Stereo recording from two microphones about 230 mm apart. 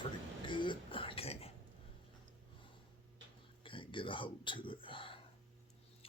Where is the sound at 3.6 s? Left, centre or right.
Left.